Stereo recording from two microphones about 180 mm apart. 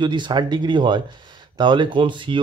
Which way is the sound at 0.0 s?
25° right (ahead or behind).